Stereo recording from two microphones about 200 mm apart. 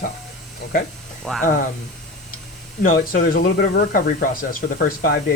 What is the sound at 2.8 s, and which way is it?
Speech, 45° left (ahead or behind).